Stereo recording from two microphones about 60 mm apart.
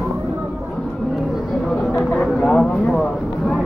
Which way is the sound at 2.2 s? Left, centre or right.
Centre.